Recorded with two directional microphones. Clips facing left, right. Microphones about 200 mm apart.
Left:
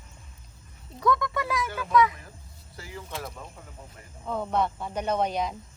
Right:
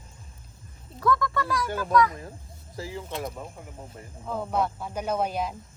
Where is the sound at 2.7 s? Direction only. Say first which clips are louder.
Right 7 dB; 30° right (ahead or behind).